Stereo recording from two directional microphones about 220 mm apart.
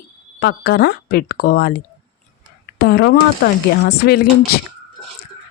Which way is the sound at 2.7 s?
45° left (ahead or behind).